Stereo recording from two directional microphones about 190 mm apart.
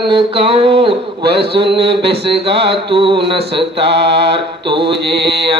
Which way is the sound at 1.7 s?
60° right (ahead or behind).